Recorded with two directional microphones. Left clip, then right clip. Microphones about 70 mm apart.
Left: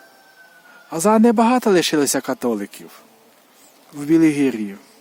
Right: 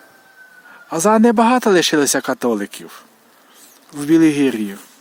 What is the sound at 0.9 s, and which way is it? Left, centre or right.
Speech, right.